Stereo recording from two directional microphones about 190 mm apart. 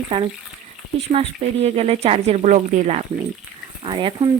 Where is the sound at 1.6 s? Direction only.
35° right (ahead or behind).